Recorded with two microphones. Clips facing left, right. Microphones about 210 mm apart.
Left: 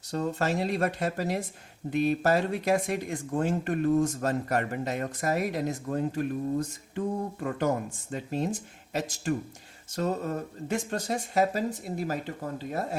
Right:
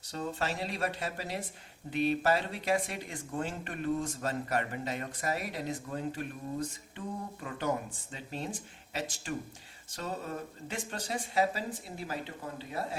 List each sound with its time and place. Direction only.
0.1 s speech: 45° left (ahead or behind)